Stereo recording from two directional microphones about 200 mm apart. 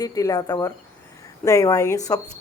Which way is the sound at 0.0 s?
15° left (ahead or behind).